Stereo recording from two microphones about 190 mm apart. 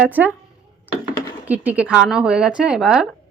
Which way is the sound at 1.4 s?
10° right (ahead or behind).